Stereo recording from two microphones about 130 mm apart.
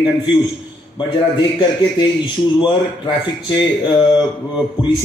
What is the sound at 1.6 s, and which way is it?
Speech, 35° left (ahead or behind).